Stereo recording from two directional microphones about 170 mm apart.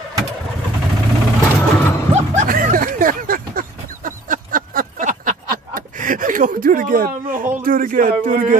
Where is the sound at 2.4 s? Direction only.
50° right (ahead or behind).